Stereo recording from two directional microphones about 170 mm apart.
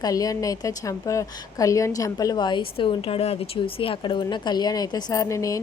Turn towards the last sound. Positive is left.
turn(degrees=20)  # may be behind; listen again after turning